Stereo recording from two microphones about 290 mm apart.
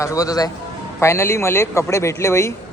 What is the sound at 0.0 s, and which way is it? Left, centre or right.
Speech, centre.